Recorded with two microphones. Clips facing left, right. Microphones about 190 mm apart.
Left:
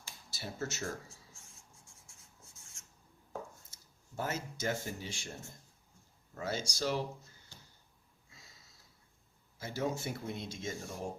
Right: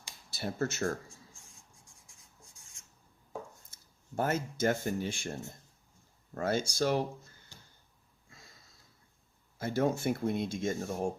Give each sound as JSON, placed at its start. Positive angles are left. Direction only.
{"t": 0.3, "sound": "speech", "side_deg": -55}
{"t": 1.7, "sound": "writing", "side_deg": -15}
{"t": 4.2, "sound": "speech", "side_deg": -55}
{"t": 6.3, "sound": "speech", "side_deg": -55}
{"t": 9.6, "sound": "speech", "side_deg": -55}